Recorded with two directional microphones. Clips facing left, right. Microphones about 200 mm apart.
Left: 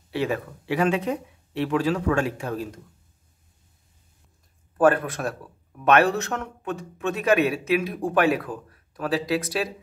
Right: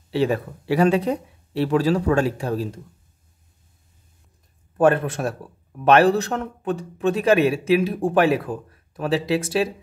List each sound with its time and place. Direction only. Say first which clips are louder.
0.1 s speech: right 5 dB; 30° right (ahead or behind)
4.7 s a man's voice: right 2 dB; 25° right (ahead or behind)